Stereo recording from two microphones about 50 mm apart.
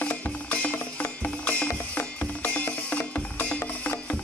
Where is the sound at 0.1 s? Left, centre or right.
Left.